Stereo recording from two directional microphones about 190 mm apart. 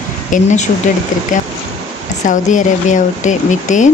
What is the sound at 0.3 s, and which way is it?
Speech, 45° left (ahead or behind).